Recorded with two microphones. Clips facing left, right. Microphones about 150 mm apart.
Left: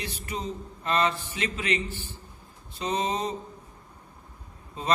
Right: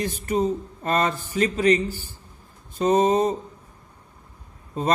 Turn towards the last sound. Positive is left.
turn(degrees=-45)  # may be behind; listen again after turning